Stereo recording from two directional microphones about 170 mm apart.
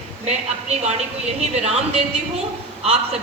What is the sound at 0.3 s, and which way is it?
A woman's voice, 40° right (ahead or behind).